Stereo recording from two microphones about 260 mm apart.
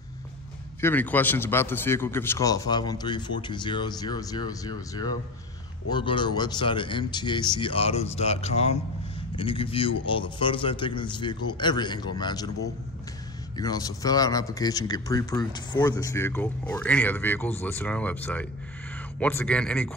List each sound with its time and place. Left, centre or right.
0.7 s speech: centre
13.6 s a man's voice: centre